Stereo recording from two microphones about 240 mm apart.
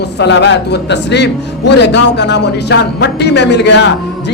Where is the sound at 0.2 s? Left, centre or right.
Left.